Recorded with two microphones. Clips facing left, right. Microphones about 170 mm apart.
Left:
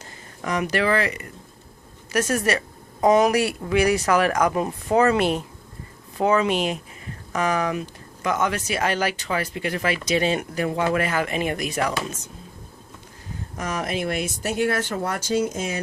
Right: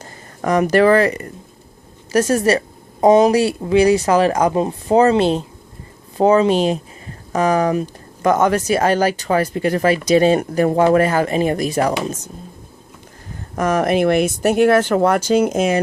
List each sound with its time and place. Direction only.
0.0 s a woman's voice: 45° right (ahead or behind)
13.6 s speech: 55° right (ahead or behind); by 15.8 s 75° right (ahead or behind)